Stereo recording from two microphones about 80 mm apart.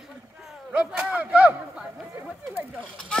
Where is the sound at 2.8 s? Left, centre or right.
Centre.